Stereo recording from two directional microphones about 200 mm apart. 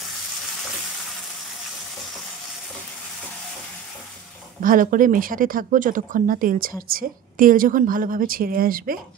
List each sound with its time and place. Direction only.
4.6 s speech: 45° right (ahead or behind)